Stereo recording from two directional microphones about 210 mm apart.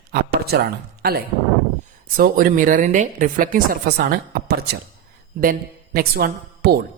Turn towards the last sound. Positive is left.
turn(degrees=-45)  # may be behind; listen again after turning